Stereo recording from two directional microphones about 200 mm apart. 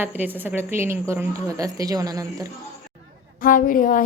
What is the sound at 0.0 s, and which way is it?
A woman's voice, 10° right (ahead or behind).